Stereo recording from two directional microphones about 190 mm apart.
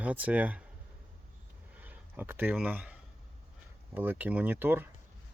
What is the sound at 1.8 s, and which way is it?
Speech, 10° right (ahead or behind).